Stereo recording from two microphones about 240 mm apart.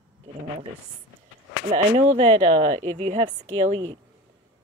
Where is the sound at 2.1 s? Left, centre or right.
Right.